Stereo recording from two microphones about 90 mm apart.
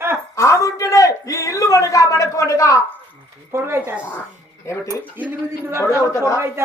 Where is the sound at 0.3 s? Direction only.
35° left (ahead or behind).